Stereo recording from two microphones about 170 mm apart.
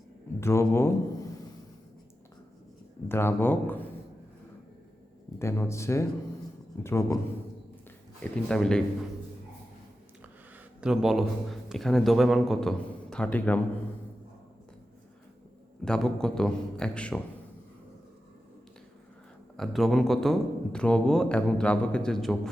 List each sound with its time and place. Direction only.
0.3 s speech: 15° left (ahead or behind)
3.1 s speech: 15° left (ahead or behind)
5.4 s speech: 15° left (ahead or behind)
8.2 s a man's voice: 5° left (ahead or behind)
10.8 s a man's voice: 5° right (ahead or behind)
15.8 s a man's voice: 5° left (ahead or behind)
19.5 s a man's voice: centre (ahead or behind)